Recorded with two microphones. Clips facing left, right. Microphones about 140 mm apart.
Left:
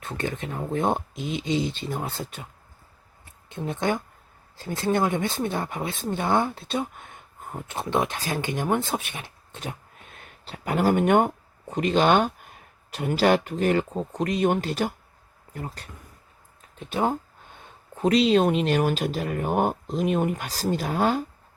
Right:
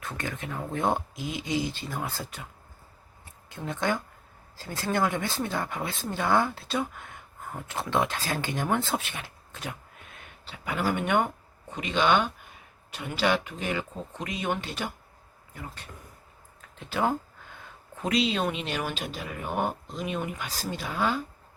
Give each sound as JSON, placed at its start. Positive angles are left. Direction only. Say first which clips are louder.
{"t": 0.0, "sound": "speech", "louder": "left 5 dB", "side_deg": 25}
{"t": 3.5, "sound": "speech", "louder": "left 3 dB", "side_deg": 20}
{"t": 10.2, "sound": "speech", "louder": "left 5 dB", "side_deg": 40}
{"t": 16.6, "sound": "a sound", "louder": "left 3 dB", "side_deg": 20}
{"t": 18.0, "sound": "speech", "louder": "left 7 dB", "side_deg": 40}